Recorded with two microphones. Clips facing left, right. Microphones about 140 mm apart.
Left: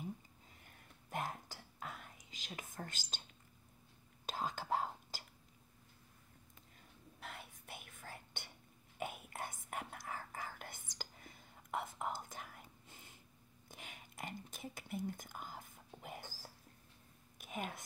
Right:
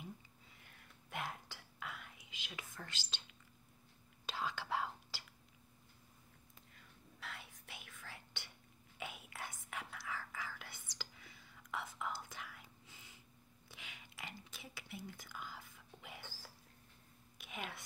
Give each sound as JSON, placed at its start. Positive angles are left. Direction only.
{"t": 1.1, "sound": "whispering", "side_deg": 40}
{"t": 7.2, "sound": "whispering", "side_deg": 50}
{"t": 13.7, "sound": "a sound", "side_deg": 45}
{"t": 14.5, "sound": "whispering", "side_deg": 45}
{"t": 17.4, "sound": "whispering", "side_deg": 45}